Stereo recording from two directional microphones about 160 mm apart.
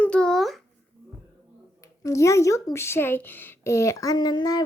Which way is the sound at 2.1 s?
20° left (ahead or behind).